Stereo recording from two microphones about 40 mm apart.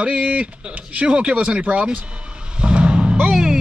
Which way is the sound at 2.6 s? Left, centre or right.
Right.